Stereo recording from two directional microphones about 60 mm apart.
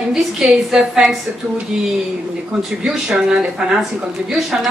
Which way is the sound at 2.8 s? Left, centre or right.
Centre.